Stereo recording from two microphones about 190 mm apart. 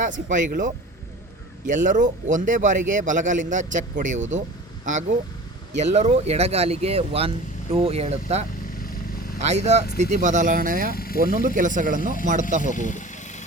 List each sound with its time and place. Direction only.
0.0 s a man's voice: 40° right (ahead or behind)
5.7 s a man's voice: 35° right (ahead or behind)
8.8 s vehicle: 50° left (ahead or behind)
9.4 s a man's voice: 35° right (ahead or behind)
10.9 s speech: 50° left (ahead or behind)
11.2 s a man's voice: 50° right (ahead or behind)
12.7 s vehicle: 40° left (ahead or behind)